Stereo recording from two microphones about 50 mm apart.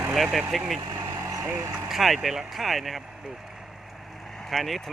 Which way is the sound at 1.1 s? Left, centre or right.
Right.